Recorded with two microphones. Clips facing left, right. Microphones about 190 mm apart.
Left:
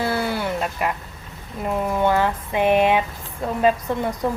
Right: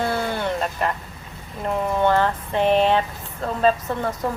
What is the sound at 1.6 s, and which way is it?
A woman's voice, 10° left (ahead or behind).